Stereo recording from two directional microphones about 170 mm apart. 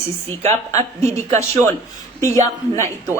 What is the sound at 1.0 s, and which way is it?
Speech, 40° right (ahead or behind).